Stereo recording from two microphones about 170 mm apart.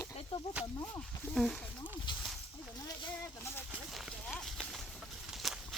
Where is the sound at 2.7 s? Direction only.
25° left (ahead or behind).